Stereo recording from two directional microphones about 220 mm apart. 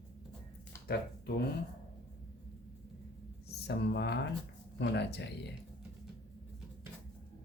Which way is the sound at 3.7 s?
50° left (ahead or behind).